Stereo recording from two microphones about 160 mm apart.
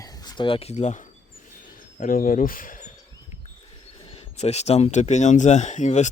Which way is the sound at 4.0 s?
35° left (ahead or behind).